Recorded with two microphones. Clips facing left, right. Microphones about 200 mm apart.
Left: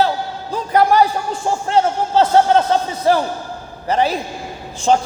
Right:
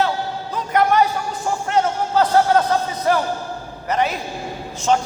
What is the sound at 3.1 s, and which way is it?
A woman's voice, 30° left (ahead or behind).